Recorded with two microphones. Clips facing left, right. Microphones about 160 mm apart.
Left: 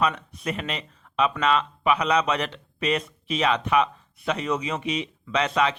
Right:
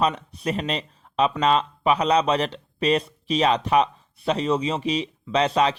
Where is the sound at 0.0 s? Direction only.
35° right (ahead or behind).